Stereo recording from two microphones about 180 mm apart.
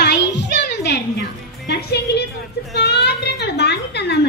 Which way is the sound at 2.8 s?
65° left (ahead or behind).